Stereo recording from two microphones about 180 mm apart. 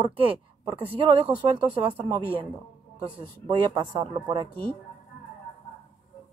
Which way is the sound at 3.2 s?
25° right (ahead or behind).